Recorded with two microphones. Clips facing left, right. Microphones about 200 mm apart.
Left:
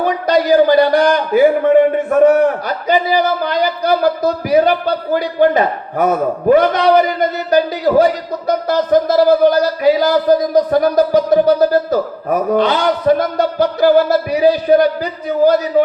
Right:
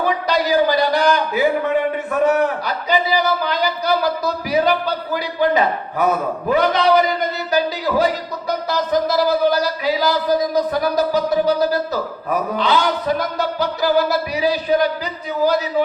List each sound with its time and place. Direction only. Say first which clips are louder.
0.0 s a man's voice: left 5 dB; 50° left (ahead or behind)